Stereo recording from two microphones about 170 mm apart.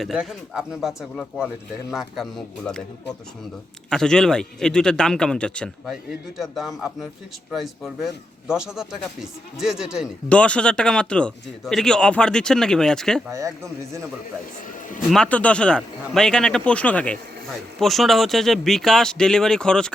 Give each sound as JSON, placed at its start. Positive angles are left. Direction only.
{"t": 0.0, "sound": "a man's voice", "side_deg": 0}
{"t": 10.2, "sound": "a man's voice", "side_deg": 5}
{"t": 15.1, "sound": "a man's voice", "side_deg": 5}